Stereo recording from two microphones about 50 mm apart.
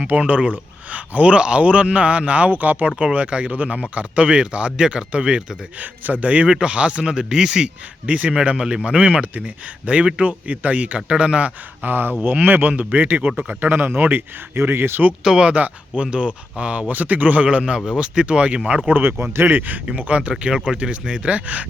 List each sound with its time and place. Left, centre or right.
0.2 s speech: right
2.9 s speech: right
5.8 s speech: right; by 7.7 s centre
8.0 s speech: right
11.9 s speech: right
15.2 s speech: centre
15.4 s speech: right
19.2 s speech: right
19.9 s speech: right